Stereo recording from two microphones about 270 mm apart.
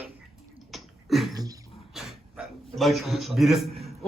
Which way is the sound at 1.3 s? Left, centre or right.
Centre.